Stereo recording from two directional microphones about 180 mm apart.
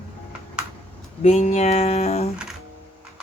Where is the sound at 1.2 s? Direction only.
35° left (ahead or behind).